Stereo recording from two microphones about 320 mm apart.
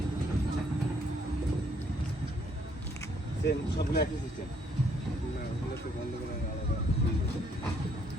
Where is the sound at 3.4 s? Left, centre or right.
Left.